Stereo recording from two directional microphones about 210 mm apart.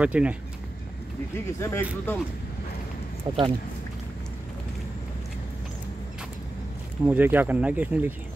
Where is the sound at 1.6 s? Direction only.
10° left (ahead or behind).